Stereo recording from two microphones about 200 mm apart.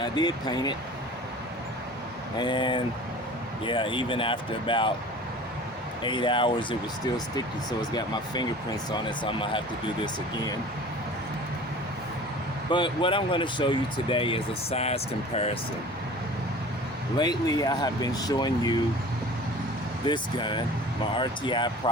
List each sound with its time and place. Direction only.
0.0 s speech: 20° left (ahead or behind)
2.4 s speech: 25° left (ahead or behind)
6.0 s speech: 25° left (ahead or behind)
7.9 s speech: 20° left (ahead or behind)
12.7 s speech: 25° left (ahead or behind)
17.2 s speech: 20° left (ahead or behind)
20.1 s speech: 25° left (ahead or behind)